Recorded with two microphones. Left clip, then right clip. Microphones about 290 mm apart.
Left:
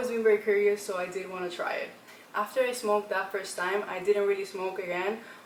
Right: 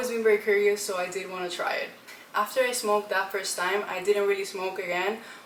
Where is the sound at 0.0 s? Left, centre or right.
Centre.